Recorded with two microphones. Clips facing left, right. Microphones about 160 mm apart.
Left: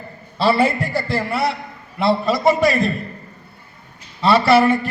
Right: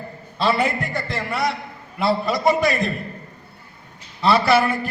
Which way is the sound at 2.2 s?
Centre (ahead or behind).